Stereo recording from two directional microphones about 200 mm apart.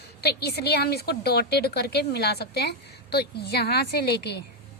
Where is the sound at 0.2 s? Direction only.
55° left (ahead or behind).